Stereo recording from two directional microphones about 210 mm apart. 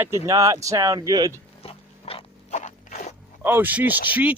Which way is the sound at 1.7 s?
25° left (ahead or behind).